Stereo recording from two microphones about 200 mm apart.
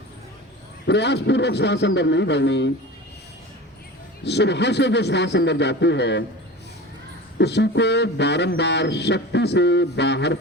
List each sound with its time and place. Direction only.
0.9 s a man's voice: 60° left (ahead or behind)
4.2 s a man's voice: 60° left (ahead or behind)
7.3 s a man's voice: 60° left (ahead or behind)